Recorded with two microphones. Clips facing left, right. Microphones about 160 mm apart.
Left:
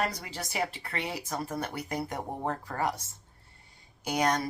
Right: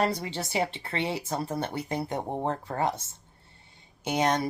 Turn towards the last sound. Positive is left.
turn(degrees=-25)  # may be behind; listen again after turning